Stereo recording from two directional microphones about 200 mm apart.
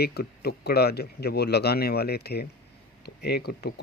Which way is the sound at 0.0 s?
50° left (ahead or behind).